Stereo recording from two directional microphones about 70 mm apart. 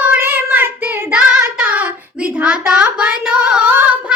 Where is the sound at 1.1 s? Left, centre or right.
Centre.